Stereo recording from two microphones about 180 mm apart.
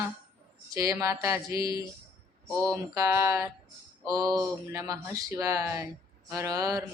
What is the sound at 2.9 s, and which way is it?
Speech, 15° right (ahead or behind).